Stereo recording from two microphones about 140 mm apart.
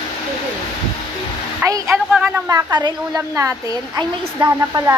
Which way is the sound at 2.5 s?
25° right (ahead or behind).